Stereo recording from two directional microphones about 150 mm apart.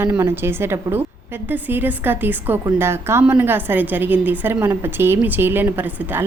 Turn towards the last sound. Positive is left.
turn(degrees=-15)  # may be behind; listen again after turning